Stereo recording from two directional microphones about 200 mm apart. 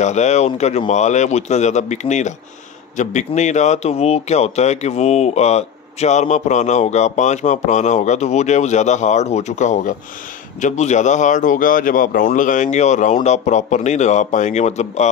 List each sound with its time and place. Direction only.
0.0 s speech: 35° left (ahead or behind)